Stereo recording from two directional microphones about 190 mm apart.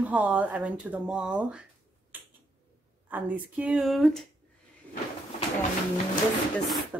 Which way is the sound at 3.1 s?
5° right (ahead or behind).